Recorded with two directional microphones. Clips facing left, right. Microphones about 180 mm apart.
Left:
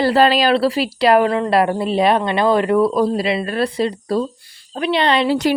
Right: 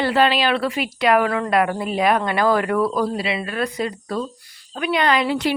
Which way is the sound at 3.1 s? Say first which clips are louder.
Left 5 dB; 40° left (ahead or behind).